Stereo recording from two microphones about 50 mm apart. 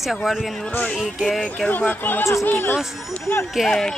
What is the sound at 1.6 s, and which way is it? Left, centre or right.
Speech, left.